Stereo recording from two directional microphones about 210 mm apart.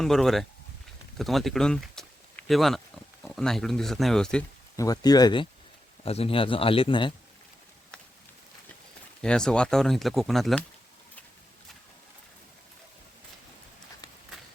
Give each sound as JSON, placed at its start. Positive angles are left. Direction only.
{"t": 0.0, "sound": "speech", "side_deg": 0}
{"t": 4.8, "sound": "a man's voice", "side_deg": 20}
{"t": 9.2, "sound": "speech", "side_deg": 5}